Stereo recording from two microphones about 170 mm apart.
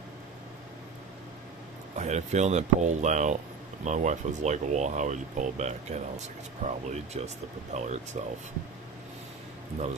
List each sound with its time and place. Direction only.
2.0 s speech: 40° right (ahead or behind)